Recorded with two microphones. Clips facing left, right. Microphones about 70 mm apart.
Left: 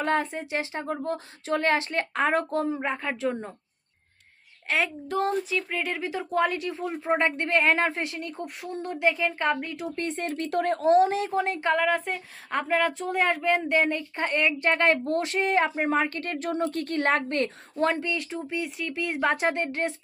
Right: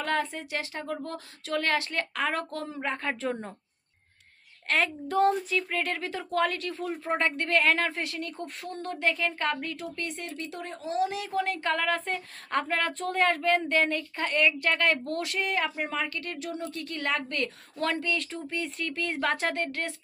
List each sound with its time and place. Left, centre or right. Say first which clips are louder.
0.0 s speech: left 3 dB; left
3.0 s speech: left 2 dB; centre
4.7 s a woman's voice: even; centre; by 10.2 s left
10.2 s speech: left 11 dB; left
11.3 s a woman's voice: left 3 dB; left